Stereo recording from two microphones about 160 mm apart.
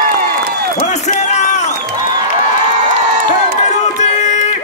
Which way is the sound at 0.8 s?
45° left (ahead or behind).